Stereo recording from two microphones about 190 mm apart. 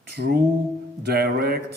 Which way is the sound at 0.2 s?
45° right (ahead or behind).